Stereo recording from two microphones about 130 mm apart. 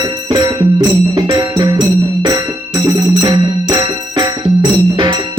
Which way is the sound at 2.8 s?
25° right (ahead or behind).